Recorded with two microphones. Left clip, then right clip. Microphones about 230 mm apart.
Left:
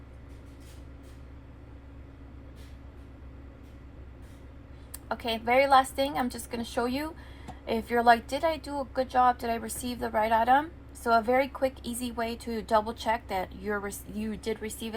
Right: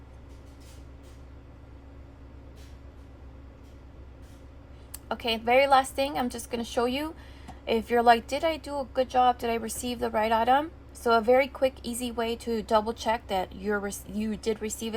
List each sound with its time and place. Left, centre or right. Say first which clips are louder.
5.0 s a woman's voice: right 2 dB; right